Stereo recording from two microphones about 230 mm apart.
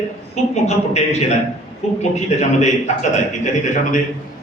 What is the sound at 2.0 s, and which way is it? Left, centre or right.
A man's voice, left.